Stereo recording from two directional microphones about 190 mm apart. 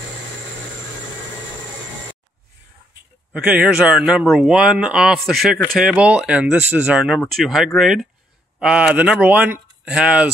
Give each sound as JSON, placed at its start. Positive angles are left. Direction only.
{"t": 3.3, "sound": "speech", "side_deg": -5}